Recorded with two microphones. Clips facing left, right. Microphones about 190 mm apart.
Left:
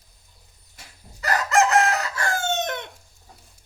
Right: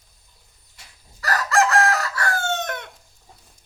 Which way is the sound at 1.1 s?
20° left (ahead or behind).